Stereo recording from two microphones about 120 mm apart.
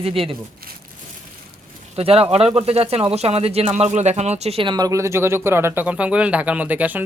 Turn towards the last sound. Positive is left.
turn(degrees=-15)  # may be behind; listen again after turning